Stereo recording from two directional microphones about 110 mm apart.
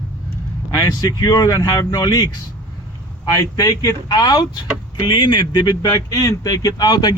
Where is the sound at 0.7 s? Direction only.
35° left (ahead or behind).